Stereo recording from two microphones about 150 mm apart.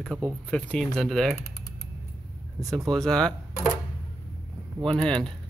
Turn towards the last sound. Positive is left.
turn(degrees=5)  # may be behind; listen again after turning